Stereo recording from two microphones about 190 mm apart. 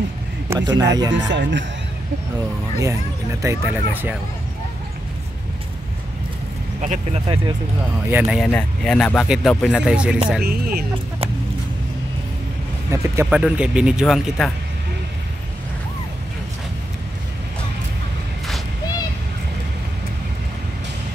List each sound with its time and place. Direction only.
0.5 s speech: 20° right (ahead or behind)
1.1 s speech: 70° right (ahead or behind)
2.8 s speech: 15° right (ahead or behind)
6.8 s speech: 40° right (ahead or behind)
8.1 s speech: 10° right (ahead or behind)
8.5 s speech: 5° left (ahead or behind)
10.4 s speech: 55° right (ahead or behind)
12.9 s speech: 15° right (ahead or behind)